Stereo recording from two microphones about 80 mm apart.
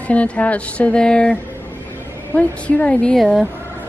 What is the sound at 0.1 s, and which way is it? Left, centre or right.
Speech, centre.